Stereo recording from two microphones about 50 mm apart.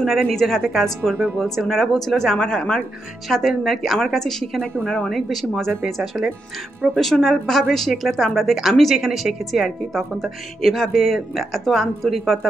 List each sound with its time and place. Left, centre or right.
0.0 s a woman's voice: centre
3.3 s a woman's voice: centre
4.0 s a woman's voice: centre
4.7 s a woman's voice: left
5.1 s a woman's voice: centre